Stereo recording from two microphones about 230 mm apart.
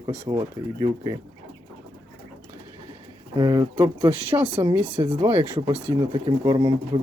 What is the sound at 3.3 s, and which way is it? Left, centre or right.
Speech, centre.